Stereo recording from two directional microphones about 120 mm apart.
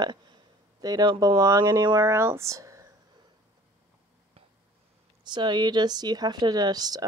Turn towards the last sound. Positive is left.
turn(degrees=-35)  # may be behind; listen again after turning